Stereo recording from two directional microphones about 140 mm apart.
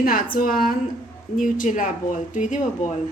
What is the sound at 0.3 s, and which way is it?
Speech, 80° left.